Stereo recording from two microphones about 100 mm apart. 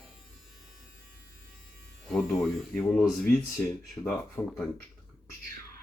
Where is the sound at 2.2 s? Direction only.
5° left (ahead or behind).